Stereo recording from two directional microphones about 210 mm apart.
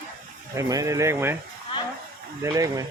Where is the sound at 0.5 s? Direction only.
15° right (ahead or behind).